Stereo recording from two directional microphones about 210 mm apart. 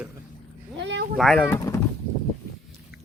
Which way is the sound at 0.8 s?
60° right (ahead or behind).